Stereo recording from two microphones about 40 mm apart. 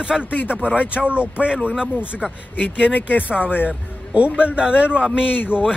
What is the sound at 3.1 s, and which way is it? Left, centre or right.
Speech, left.